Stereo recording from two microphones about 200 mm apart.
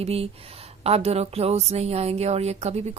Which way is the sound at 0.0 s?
30° right (ahead or behind).